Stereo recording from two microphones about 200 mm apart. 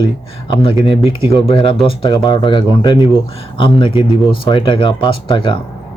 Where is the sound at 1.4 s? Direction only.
25° left (ahead or behind).